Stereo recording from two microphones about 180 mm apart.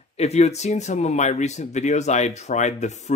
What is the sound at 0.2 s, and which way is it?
Speech, 35° left (ahead or behind).